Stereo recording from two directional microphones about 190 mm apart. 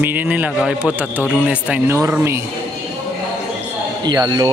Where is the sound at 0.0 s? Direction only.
10° right (ahead or behind).